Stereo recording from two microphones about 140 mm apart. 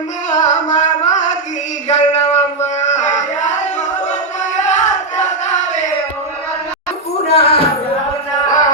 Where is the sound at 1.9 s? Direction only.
55° left (ahead or behind).